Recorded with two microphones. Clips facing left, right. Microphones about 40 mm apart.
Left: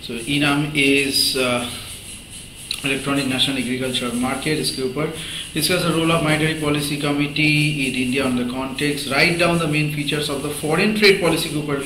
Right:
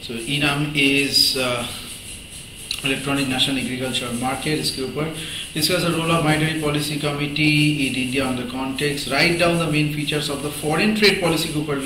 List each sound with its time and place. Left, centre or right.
0.1 s a man's voice: centre
2.8 s a man's voice: centre